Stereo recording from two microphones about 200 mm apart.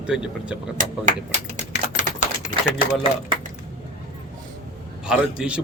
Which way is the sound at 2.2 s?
40° left (ahead or behind).